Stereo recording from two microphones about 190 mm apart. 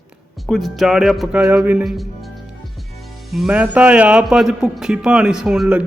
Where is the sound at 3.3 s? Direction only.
Centre (ahead or behind).